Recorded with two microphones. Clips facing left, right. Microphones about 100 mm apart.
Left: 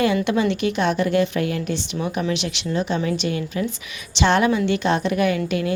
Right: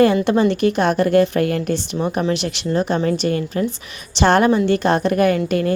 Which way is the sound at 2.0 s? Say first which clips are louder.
Right 3 dB; 30° right (ahead or behind).